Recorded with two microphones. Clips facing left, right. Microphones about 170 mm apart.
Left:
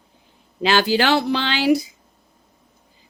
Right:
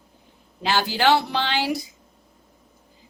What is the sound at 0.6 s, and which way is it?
Speech, 90° left.